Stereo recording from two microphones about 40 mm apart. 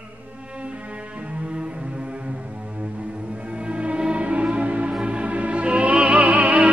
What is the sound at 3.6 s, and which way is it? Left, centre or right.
Music, right.